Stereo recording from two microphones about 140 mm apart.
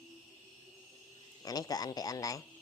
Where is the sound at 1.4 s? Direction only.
25° left (ahead or behind).